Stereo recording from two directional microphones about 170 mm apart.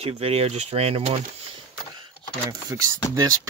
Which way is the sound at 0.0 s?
35° right (ahead or behind).